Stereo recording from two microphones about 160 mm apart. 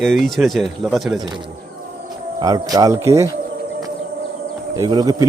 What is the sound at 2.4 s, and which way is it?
Speech, 20° right (ahead or behind).